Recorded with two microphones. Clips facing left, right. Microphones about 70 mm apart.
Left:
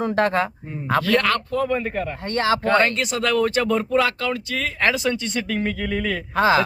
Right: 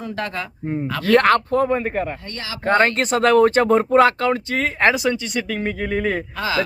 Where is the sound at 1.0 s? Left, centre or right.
Right.